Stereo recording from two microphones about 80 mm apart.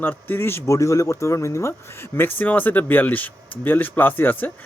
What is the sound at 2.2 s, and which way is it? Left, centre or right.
Speech, left.